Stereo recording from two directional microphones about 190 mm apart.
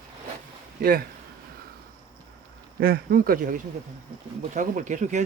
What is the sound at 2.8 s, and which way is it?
Speech, 50° right (ahead or behind).